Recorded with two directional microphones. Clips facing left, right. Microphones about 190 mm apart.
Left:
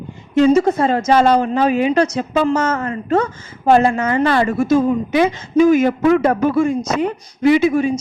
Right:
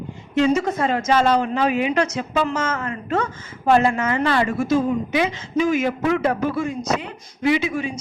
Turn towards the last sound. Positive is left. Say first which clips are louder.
# left 7 dB
turn(degrees=45)  # may be behind; listen again after turning